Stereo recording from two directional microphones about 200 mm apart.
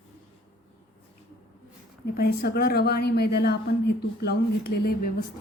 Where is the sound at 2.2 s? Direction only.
50° left (ahead or behind).